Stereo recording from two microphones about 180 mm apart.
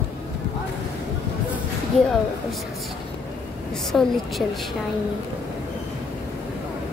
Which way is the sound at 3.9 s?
Centre (ahead or behind).